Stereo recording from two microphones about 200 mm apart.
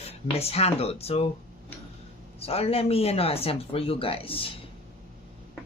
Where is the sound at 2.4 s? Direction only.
30° left (ahead or behind).